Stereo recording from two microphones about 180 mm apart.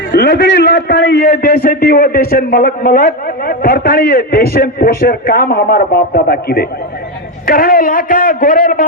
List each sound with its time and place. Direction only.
0.1 s a man's voice: 60° left (ahead or behind)